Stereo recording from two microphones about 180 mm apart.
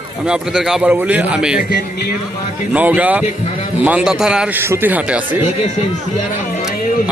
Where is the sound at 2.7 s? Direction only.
10° right (ahead or behind).